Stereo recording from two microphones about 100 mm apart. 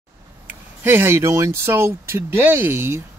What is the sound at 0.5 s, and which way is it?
Speech, 20° right (ahead or behind).